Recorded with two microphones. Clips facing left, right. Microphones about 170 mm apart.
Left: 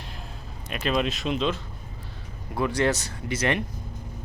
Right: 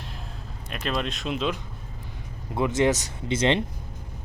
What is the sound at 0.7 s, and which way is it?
Speech, centre (ahead or behind).